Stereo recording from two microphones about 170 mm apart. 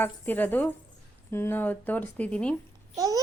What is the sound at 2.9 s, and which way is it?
Speech, 20° right (ahead or behind).